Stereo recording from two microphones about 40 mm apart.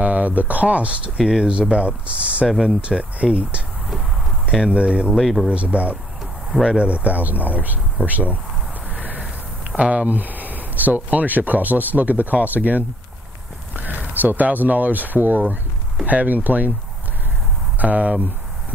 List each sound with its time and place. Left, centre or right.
0.0 s speech: right
1.1 s speech: centre
1.5 s speech: right
2.9 s speech: centre
4.5 s speech: centre
4.7 s speech: right
5.1 s speech: centre
5.5 s speech: right
6.5 s speech: centre
6.8 s speech: right
8.9 s a sound: right
9.7 s speech: right
10.0 s speech: right
17.7 s speech: right